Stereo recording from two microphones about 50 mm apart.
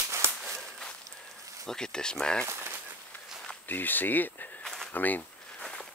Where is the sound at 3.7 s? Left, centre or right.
Left.